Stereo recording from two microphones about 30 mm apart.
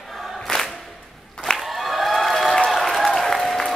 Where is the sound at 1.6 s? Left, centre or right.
Centre.